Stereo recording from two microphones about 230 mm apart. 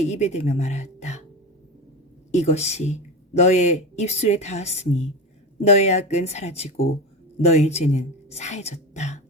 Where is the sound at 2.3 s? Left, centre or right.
Left.